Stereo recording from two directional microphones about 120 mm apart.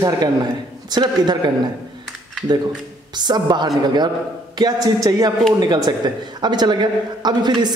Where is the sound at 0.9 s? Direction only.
35° right (ahead or behind).